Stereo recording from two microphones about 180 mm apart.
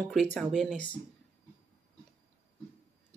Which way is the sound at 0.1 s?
Centre (ahead or behind).